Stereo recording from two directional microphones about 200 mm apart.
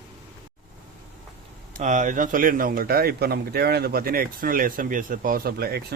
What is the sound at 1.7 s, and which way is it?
Speech, 40° right (ahead or behind).